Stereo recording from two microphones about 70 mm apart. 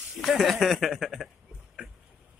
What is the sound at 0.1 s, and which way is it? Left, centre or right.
Speech, centre.